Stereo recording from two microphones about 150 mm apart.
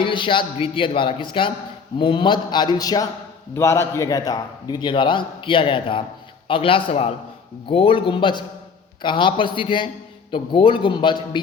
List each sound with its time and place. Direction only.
0.0 s a man's voice: 35° left (ahead or behind)